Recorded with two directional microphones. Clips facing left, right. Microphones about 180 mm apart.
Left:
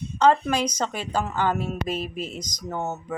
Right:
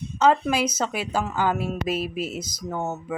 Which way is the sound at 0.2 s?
5° right (ahead or behind).